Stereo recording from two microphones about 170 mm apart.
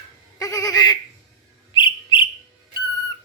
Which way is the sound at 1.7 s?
30° left (ahead or behind).